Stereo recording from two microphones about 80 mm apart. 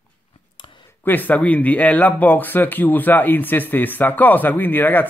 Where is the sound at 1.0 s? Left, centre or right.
Left.